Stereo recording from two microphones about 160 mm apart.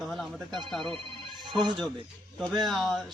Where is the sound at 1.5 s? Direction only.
30° right (ahead or behind).